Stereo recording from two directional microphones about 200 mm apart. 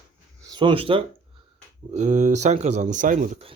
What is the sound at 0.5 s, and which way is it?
Speech, 25° right (ahead or behind).